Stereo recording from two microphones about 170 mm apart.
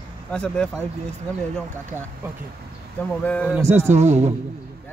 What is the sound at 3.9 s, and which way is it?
Speech, 40° right (ahead or behind).